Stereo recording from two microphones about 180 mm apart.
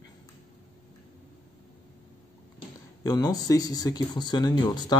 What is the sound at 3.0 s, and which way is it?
Speech, 20° left (ahead or behind).